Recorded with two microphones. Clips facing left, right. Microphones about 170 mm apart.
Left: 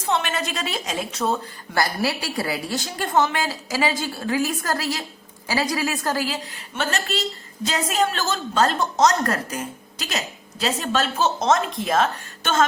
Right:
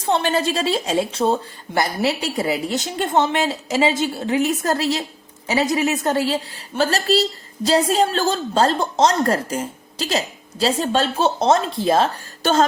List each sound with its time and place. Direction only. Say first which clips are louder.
0.0 s a woman's voice: right 5 dB; 30° right (ahead or behind)